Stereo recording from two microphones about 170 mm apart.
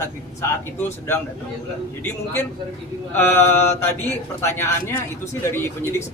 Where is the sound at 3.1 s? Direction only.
15° left (ahead or behind).